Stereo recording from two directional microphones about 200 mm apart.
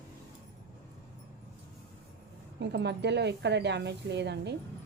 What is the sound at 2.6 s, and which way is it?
Speech, 60° right (ahead or behind).